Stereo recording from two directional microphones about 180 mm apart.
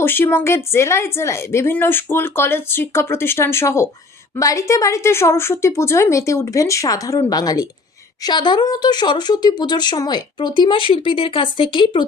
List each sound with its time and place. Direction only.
0.0 s a woman's voice: 10° left (ahead or behind)